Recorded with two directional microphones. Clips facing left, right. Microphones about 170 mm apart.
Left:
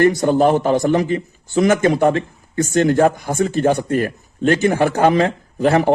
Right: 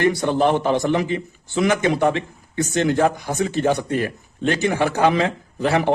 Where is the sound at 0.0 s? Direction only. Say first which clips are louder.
Left 4 dB; 45° left (ahead or behind).